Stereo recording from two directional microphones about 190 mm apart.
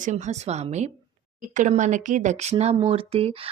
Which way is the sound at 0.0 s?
40° right (ahead or behind).